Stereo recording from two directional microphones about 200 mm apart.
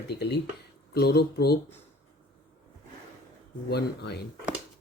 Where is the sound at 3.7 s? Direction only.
55° left (ahead or behind).